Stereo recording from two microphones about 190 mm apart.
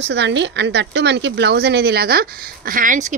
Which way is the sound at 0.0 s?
65° right (ahead or behind).